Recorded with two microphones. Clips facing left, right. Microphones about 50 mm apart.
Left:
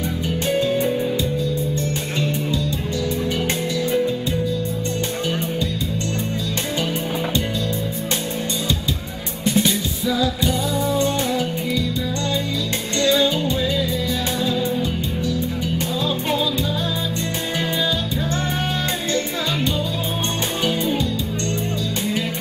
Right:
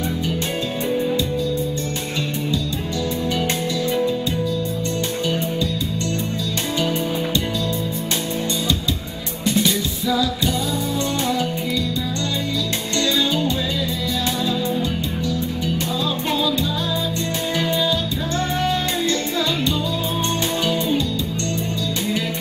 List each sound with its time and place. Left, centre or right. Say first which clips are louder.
9.4 s music: even; left
13.0 s music: left 4 dB; left
14.5 s music: even; left